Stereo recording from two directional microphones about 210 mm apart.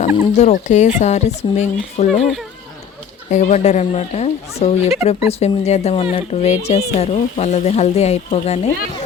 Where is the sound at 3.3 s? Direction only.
35° left (ahead or behind).